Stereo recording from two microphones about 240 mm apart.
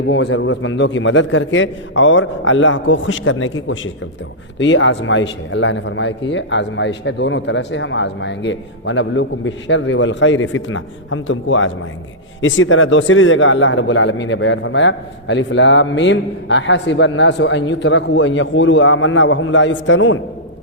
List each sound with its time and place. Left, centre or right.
0.1 s a man's voice: left